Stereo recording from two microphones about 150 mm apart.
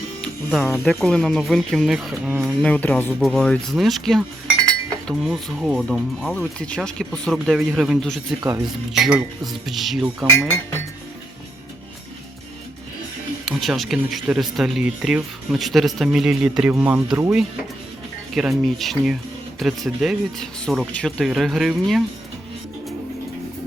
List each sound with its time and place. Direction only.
0.9 s speech: 5° left (ahead or behind)
2.7 s speech: 10° left (ahead or behind)
8.4 s speech: 20° right (ahead or behind)
8.6 s speech: centre (ahead or behind)
13.4 s speech: centre (ahead or behind)
18.3 s speech: centre (ahead or behind)